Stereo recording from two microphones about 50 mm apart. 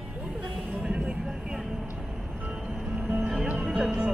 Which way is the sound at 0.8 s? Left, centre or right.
Centre.